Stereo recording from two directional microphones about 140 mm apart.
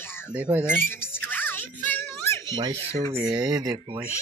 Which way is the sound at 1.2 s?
15° left (ahead or behind).